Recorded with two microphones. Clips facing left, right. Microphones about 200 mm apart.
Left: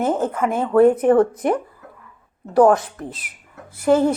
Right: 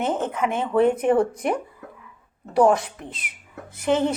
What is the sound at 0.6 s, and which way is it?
Speech, 55° left (ahead or behind).